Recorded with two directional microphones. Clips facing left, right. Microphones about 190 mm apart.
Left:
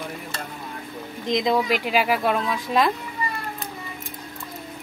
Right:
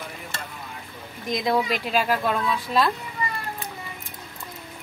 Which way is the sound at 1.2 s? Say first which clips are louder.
Left 2 dB; 20° left (ahead or behind).